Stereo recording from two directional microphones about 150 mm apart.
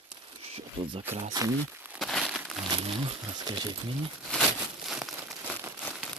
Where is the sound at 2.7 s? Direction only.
35° right (ahead or behind).